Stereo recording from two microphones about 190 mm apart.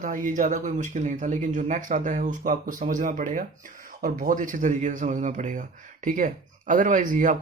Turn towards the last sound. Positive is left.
turn(degrees=-45)  # may be behind; listen again after turning